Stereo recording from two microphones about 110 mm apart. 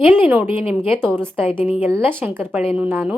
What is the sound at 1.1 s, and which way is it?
A woman's voice, 20° right (ahead or behind).